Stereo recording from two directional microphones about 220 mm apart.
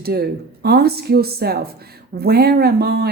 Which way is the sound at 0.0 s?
45° right (ahead or behind).